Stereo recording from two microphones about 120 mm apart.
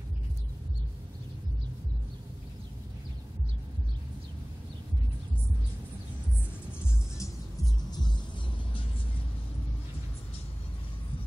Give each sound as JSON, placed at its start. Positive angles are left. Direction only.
{"t": 7.2, "sound": "music", "side_deg": 30}